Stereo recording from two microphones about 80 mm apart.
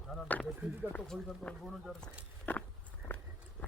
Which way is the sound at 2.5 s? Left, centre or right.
Left.